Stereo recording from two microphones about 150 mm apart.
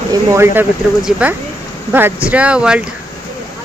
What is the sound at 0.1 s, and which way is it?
Speech, 15° right (ahead or behind).